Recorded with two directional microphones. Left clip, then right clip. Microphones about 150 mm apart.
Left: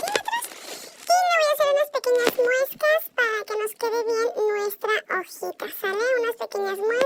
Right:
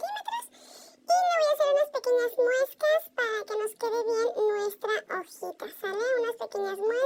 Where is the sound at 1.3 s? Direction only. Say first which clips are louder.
Left 4 dB; 20° left (ahead or behind).